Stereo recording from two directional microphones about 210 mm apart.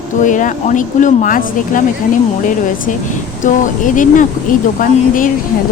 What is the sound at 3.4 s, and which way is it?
A woman's voice, 40° left (ahead or behind).